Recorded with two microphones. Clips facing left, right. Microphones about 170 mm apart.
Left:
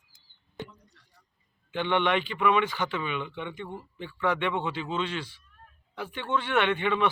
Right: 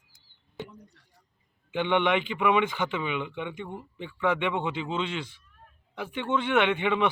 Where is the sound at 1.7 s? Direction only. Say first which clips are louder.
Right 1 dB; 15° right (ahead or behind).